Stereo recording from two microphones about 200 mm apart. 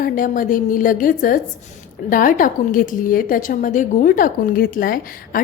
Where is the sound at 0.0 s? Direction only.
45° left (ahead or behind).